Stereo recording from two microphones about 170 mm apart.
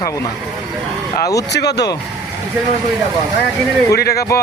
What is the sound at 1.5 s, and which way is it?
Speech, 80° left.